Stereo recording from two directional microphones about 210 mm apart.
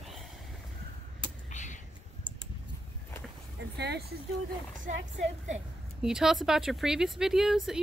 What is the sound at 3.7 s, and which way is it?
Speech, 50° right (ahead or behind).